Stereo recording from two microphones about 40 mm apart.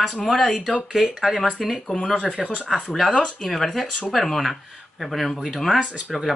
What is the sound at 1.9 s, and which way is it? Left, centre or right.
Speech, centre.